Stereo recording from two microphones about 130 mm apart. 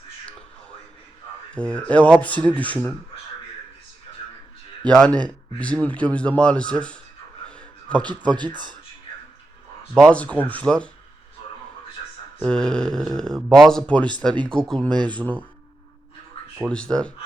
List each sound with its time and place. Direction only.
1.5 s speech: 10° left (ahead or behind)
4.9 s speech: 5° left (ahead or behind)
7.4 s a sound: 10° left (ahead or behind)
8.0 s speech: 35° right (ahead or behind)
9.9 s speech: 10° left (ahead or behind)
12.4 s speech: 5° left (ahead or behind)
14.8 s speech: 35° right (ahead or behind)
15.1 s speech: 10° left (ahead or behind)
16.6 s speech: 5° left (ahead or behind)